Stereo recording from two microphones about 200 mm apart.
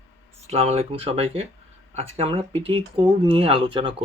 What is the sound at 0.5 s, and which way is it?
Speech, 30° right (ahead or behind).